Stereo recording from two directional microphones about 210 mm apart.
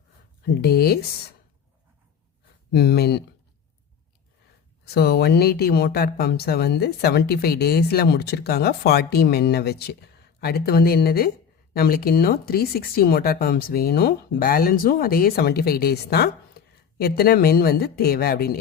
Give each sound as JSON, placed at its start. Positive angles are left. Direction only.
{"t": 0.6, "sound": "speech", "side_deg": 50}
{"t": 2.7, "sound": "speech", "side_deg": 50}
{"t": 4.9, "sound": "speech", "side_deg": 50}